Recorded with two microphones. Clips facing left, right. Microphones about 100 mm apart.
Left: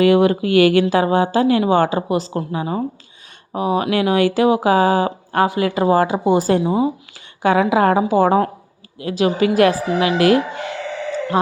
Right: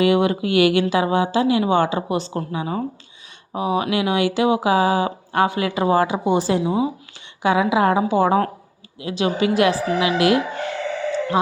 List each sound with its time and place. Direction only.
0.0 s a woman's voice: 40° left (ahead or behind)